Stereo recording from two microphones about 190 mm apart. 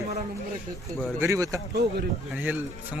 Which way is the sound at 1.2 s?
15° right (ahead or behind).